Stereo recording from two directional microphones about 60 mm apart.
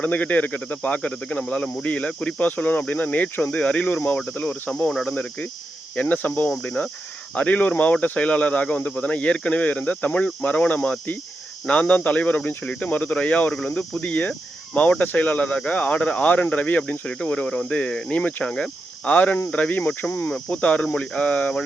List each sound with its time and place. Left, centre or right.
0.0 s speech: left
13.5 s speech: centre
18.5 s cricket: centre
19.1 s speech: left